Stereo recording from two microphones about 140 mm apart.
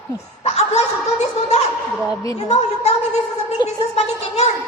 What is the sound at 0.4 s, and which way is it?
A woman's voice, 50° left (ahead or behind).